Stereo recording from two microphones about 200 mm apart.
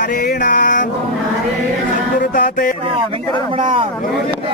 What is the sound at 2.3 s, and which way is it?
Music, 45° left (ahead or behind).